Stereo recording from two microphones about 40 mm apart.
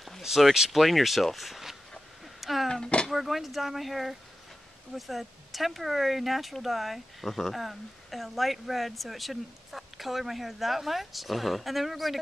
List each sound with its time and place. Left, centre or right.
0.2 s speech: centre
2.4 s a sound: centre
3.1 s speech: centre